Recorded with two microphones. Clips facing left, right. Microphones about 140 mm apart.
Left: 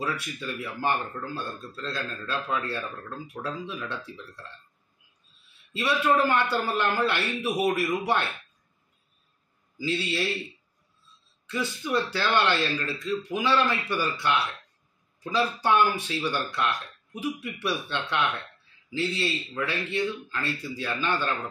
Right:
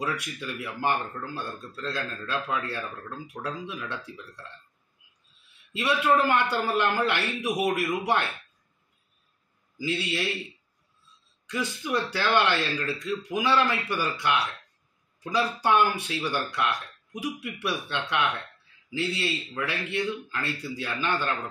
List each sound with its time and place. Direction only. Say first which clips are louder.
0.0 s speech: even; 15° right (ahead or behind)
5.7 s a man's voice: even; 15° right (ahead or behind)
9.8 s speech: left 1 dB; 15° right (ahead or behind)
11.5 s speech: left 1 dB; 15° right (ahead or behind)